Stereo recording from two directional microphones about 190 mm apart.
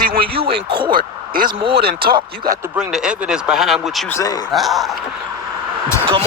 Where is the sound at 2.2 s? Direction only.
20° right (ahead or behind).